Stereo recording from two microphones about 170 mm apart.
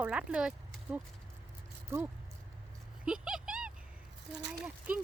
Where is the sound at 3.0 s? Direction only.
5° right (ahead or behind).